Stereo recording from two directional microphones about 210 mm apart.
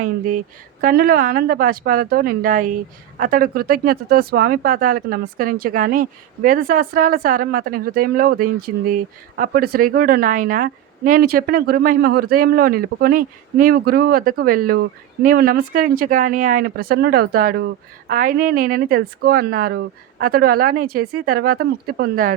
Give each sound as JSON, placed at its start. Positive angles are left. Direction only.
{"t": 0.0, "sound": "a woman's voice", "side_deg": -40}